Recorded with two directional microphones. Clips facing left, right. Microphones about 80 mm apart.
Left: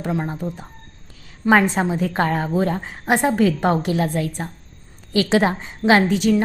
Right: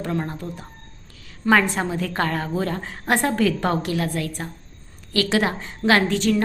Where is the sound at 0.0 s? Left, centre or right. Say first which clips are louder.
Left 2 dB; centre.